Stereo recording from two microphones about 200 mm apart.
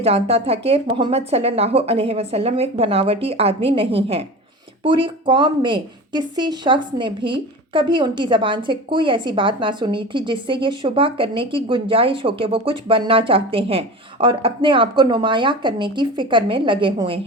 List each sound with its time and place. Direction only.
0.0 s speech: 30° right (ahead or behind)